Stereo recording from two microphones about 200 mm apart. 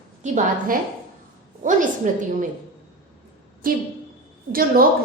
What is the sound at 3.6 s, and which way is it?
A woman's voice, 45° right (ahead or behind).